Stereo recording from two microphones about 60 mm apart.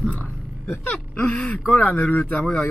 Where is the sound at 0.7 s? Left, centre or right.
Left.